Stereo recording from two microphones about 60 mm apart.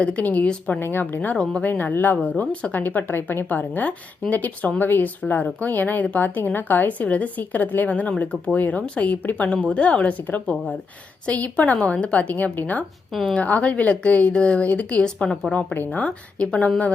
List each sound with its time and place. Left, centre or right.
0.0 s a woman's voice: left
0.8 s a woman's voice: left
2.8 s a woman's voice: left; by 12.3 s centre
12.3 s a woman's voice: left; by 15.5 s centre
15.5 s a woman's voice: left
15.9 s a woman's voice: left